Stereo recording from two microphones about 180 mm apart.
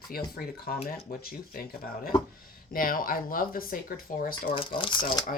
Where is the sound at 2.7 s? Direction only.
50° left (ahead or behind).